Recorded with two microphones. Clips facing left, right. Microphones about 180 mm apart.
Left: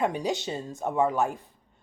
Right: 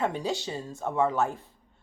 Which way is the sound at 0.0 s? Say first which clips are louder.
Left 2 dB; 15° left (ahead or behind).